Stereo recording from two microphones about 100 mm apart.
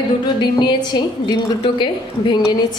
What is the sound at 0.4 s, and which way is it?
A woman's voice, 50° left (ahead or behind).